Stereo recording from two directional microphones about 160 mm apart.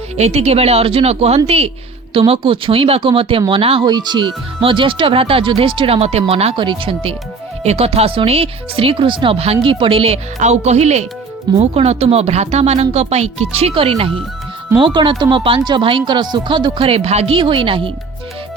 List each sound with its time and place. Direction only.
0.2 s speech: 40° right (ahead or behind)